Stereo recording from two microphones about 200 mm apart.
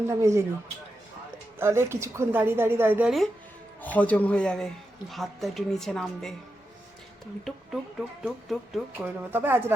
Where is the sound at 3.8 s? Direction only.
5° left (ahead or behind).